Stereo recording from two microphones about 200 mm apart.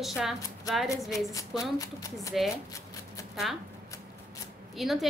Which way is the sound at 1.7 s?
15° left (ahead or behind).